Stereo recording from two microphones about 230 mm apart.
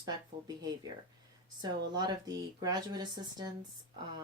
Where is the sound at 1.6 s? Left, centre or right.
Centre.